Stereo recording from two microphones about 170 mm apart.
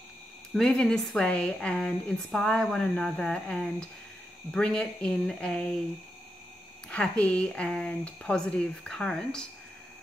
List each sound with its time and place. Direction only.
0.6 s a woman's voice: 5° left (ahead or behind)
6.9 s a woman's voice: 5° left (ahead or behind)